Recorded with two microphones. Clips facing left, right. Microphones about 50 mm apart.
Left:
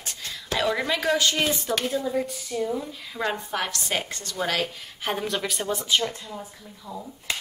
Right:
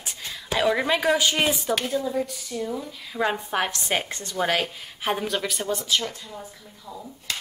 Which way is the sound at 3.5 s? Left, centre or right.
Right.